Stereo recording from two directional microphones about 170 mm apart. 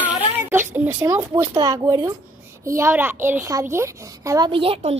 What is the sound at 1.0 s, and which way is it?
A child's voice, 20° right (ahead or behind).